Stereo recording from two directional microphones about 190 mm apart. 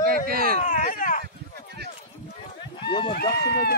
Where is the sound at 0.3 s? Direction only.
50° right (ahead or behind).